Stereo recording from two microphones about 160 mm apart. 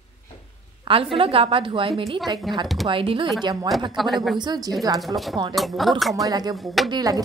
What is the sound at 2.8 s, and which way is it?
Speech, 35° right (ahead or behind).